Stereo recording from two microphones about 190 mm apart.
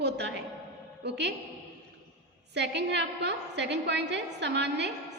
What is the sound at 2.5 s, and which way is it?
A woman's voice, 65° right (ahead or behind).